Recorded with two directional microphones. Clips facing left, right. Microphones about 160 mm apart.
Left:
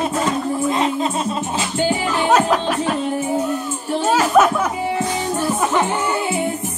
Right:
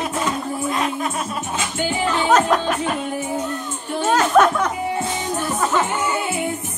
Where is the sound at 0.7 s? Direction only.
25° left (ahead or behind).